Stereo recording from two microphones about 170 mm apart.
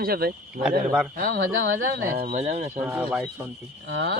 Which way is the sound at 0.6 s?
5° right (ahead or behind).